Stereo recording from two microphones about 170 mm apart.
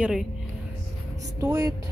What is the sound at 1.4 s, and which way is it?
Speech, 20° right (ahead or behind).